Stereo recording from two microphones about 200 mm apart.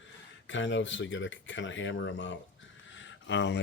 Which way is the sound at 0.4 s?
65° left (ahead or behind).